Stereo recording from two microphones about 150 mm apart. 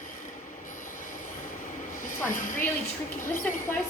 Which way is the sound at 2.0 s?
65° left (ahead or behind).